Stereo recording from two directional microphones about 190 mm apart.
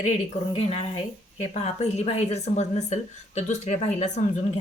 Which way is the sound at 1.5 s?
35° left (ahead or behind).